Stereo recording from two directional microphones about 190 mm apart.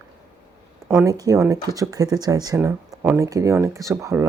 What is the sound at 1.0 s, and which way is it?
Speech, 20° right (ahead or behind).